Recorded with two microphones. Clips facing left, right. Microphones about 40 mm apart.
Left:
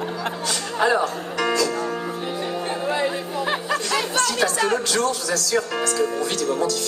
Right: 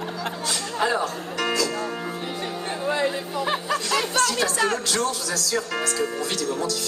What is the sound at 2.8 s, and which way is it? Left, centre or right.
Chatter, centre.